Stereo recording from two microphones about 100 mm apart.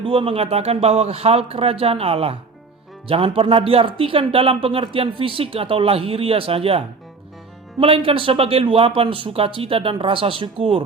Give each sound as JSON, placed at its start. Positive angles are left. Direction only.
{"t": 0.0, "sound": "a man's voice", "side_deg": -60}
{"t": 3.1, "sound": "speech", "side_deg": -65}